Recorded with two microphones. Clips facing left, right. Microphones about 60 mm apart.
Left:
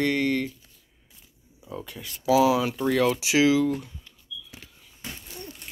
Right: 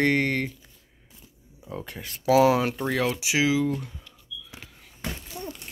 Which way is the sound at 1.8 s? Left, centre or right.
Right.